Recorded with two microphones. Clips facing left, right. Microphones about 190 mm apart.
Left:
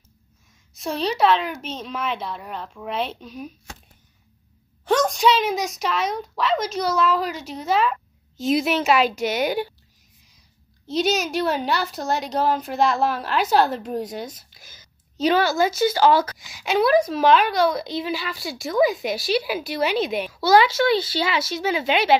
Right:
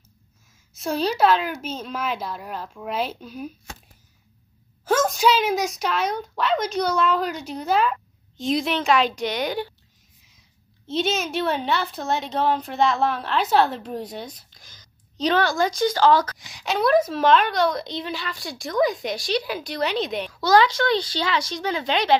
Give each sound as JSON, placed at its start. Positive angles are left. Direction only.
{"t": 0.7, "sound": "a woman's voice", "side_deg": 0}
{"t": 4.8, "sound": "a woman's voice", "side_deg": -5}
{"t": 10.9, "sound": "a woman's voice", "side_deg": 0}